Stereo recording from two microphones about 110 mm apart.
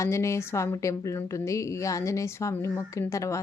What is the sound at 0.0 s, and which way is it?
Speech, 25° left (ahead or behind).